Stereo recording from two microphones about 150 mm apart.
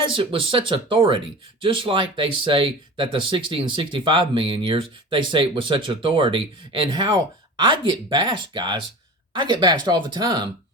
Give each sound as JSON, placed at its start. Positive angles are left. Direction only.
{"t": 0.1, "sound": "speech", "side_deg": -35}